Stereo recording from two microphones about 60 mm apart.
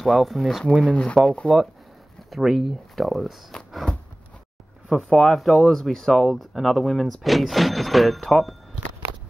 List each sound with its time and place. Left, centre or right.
0.0 s speech: centre
0.7 s speech: centre
2.3 s speech: centre
4.8 s speech: centre